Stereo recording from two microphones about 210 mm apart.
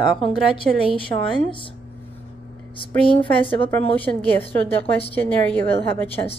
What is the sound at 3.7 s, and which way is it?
Speech, 10° left (ahead or behind).